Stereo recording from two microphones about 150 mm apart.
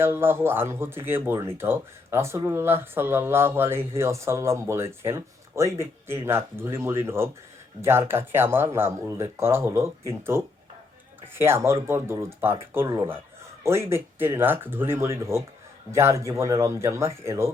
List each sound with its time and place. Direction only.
0.0 s speech: 15° right (ahead or behind)